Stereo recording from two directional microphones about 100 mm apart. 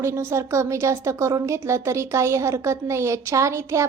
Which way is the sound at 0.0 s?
25° right (ahead or behind).